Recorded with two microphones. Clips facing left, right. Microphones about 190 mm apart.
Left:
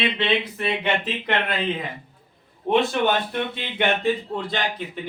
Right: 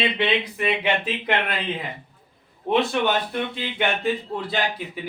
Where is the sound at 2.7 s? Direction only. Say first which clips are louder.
Left 1 dB; centre (ahead or behind).